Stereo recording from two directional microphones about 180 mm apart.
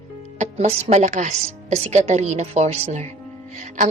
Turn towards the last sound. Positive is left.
turn(degrees=-40)  # may be behind; listen again after turning